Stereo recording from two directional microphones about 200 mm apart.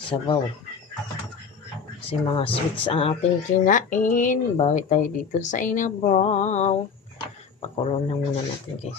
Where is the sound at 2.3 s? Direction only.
25° left (ahead or behind).